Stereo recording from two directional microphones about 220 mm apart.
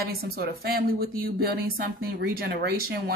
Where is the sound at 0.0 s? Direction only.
45° right (ahead or behind).